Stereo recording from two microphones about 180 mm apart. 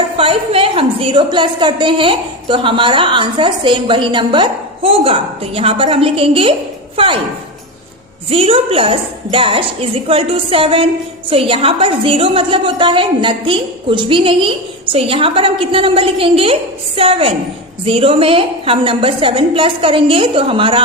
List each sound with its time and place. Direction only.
0.2 s a woman's voice: 30° right (ahead or behind)
8.3 s a woman's voice: 30° right (ahead or behind)